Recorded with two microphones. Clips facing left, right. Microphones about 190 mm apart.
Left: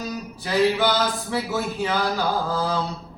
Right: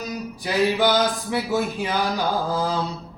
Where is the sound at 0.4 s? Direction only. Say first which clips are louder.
Even; 15° right (ahead or behind).